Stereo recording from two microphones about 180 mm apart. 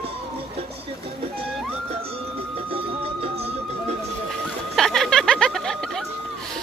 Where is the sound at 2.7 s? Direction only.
30° right (ahead or behind).